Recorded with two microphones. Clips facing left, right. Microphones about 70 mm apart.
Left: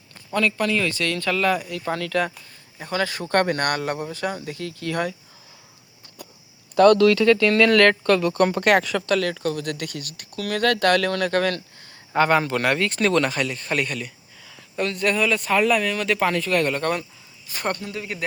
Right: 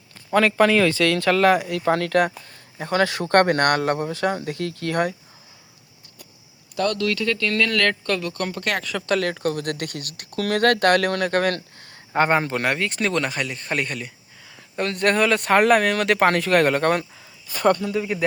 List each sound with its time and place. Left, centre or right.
0.3 s speech: right
6.7 s speech: left
7.0 s speech: left
7.3 s speech: centre
8.3 s speech: left
9.0 s speech: right
9.4 s speech: right
10.6 s speech: right
12.1 s speech: right
14.8 s speech: right